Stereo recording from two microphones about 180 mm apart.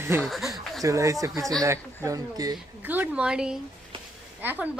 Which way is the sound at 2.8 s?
10° right (ahead or behind).